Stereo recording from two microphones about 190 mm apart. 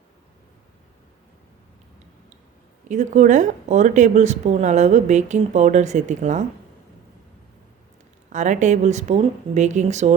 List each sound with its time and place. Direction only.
2.9 s speech: 40° right (ahead or behind)
8.3 s speech: 40° right (ahead or behind)